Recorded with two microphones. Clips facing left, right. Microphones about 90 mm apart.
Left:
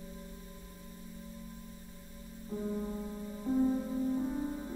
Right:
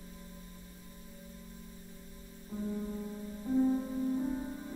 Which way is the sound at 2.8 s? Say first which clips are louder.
Left 1 dB; 20° left (ahead or behind).